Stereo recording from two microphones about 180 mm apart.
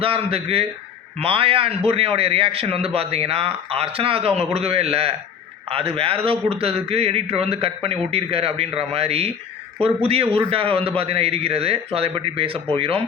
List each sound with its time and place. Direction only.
0.0 s a man's voice: 30° right (ahead or behind)